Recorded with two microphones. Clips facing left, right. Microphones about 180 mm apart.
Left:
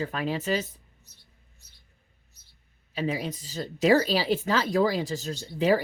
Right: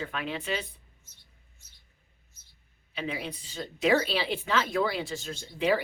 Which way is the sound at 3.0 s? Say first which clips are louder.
Left 5 dB; 40° left (ahead or behind).